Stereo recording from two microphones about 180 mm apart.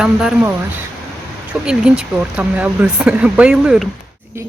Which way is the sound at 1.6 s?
5° right (ahead or behind).